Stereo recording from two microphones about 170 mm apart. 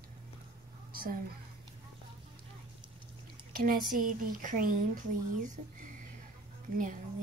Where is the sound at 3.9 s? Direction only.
50° right (ahead or behind).